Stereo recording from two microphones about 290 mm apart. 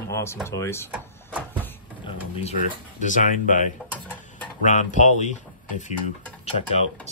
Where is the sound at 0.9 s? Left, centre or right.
Centre.